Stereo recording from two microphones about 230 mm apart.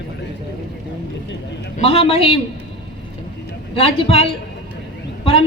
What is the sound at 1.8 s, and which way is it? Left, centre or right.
Speech, left.